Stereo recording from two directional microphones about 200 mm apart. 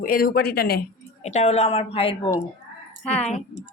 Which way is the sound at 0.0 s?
45° left (ahead or behind).